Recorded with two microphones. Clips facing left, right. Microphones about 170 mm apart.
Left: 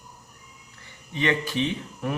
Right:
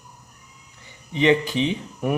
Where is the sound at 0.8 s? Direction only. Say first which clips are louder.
Right 7 dB; 20° right (ahead or behind).